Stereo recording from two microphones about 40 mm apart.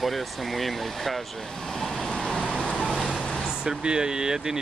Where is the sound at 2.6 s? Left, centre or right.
Left.